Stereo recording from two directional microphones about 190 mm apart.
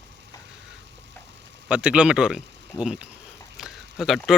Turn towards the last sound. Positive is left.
turn(degrees=0)  # may be behind; listen again after turning